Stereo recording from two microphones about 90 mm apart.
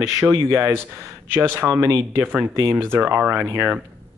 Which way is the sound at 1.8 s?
35° right (ahead or behind).